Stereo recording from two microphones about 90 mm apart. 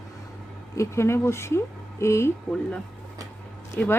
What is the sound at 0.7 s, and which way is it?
Speech, 30° left (ahead or behind).